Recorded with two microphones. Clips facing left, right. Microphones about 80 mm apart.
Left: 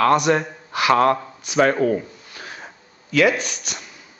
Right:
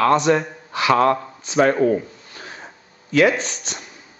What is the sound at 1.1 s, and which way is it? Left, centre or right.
Speech, right.